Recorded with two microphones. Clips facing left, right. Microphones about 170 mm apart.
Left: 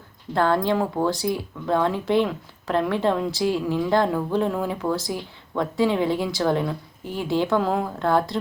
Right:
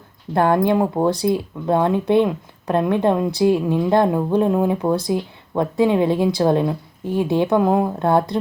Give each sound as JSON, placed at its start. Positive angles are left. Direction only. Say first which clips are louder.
{"t": 0.3, "sound": "speech", "louder": "right 4 dB", "side_deg": -15}